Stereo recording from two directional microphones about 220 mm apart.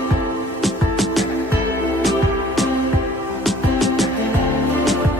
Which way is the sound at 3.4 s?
Centre (ahead or behind).